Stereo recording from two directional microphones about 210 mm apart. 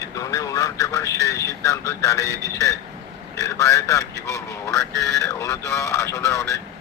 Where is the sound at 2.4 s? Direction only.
15° right (ahead or behind).